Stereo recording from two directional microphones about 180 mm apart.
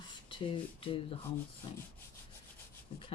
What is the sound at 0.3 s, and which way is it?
Speech, 30° left (ahead or behind).